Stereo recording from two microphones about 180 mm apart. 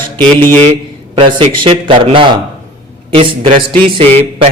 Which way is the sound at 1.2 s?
25° right (ahead or behind).